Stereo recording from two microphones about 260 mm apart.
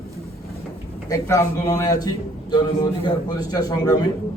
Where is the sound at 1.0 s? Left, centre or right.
Centre.